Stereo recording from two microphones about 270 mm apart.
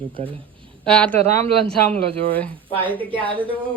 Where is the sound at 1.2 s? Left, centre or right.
Right.